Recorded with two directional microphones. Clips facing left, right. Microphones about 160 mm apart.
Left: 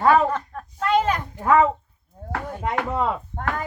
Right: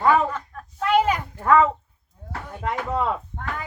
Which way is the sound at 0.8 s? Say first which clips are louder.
Right 1 dB; 10° right (ahead or behind).